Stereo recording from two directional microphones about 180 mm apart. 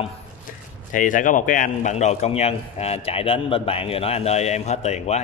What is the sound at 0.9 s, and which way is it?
A man's voice, 45° left (ahead or behind).